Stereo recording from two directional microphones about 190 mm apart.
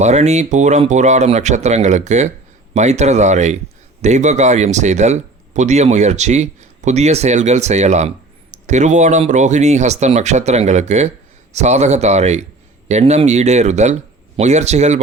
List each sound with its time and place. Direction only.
0.0 s speech: 35° right (ahead or behind)